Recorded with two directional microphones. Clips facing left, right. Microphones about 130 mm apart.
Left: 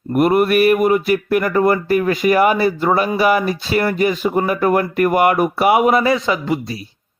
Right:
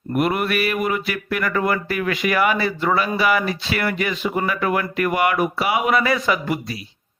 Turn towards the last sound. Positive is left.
turn(degrees=25)  # may be behind; listen again after turning